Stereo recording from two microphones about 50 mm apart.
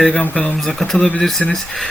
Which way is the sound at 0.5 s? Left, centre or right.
Centre.